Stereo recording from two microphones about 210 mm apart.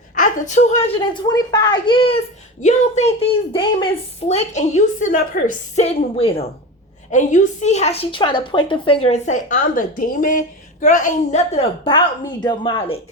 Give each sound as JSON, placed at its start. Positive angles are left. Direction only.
{"t": 0.2, "sound": "a woman's voice", "side_deg": 35}